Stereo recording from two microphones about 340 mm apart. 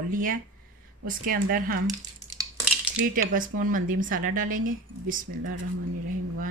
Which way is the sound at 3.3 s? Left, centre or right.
Right.